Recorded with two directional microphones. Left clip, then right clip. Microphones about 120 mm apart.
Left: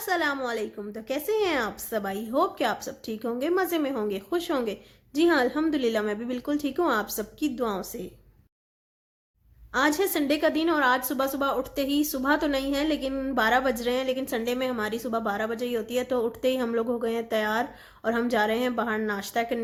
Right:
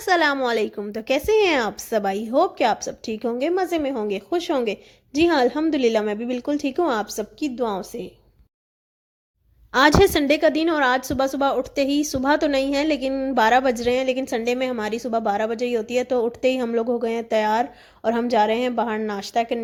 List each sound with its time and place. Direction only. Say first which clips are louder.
0.0 s a woman's voice: right 8 dB; 90° right; by 8.1 s 40° right (ahead or behind)
9.7 s a woman's voice: right 9 dB; 90° right; by 19.6 s 40° right (ahead or behind)